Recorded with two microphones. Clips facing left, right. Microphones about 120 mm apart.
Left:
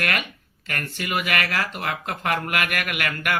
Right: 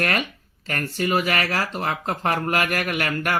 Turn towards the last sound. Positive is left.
turn(degrees=-35)  # may be behind; listen again after turning